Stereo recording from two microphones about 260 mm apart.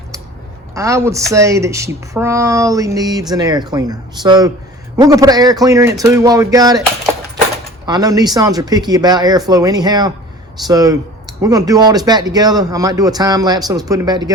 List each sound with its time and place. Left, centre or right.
0.7 s speech: centre
7.9 s speech: centre